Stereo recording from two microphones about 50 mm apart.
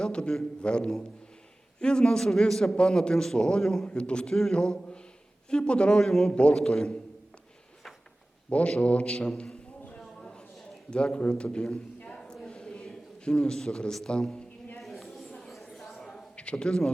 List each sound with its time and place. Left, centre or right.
0.0 s a man's voice: centre
3.8 s a man's voice: centre
6.0 s a man's voice: centre
8.4 s a man's voice: left
10.0 s a sound: centre
10.9 s a man's voice: centre
12.0 s a sound: centre
14.8 s a sound: centre
16.3 s a man's voice: left